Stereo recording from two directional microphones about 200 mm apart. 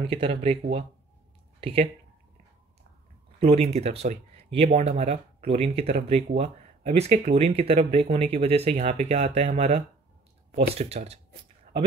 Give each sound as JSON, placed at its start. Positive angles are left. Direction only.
{"t": 0.0, "sound": "speech", "side_deg": -25}
{"t": 3.3, "sound": "speech", "side_deg": -30}